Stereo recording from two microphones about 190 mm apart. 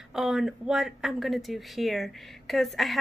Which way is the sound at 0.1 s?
Centre (ahead or behind).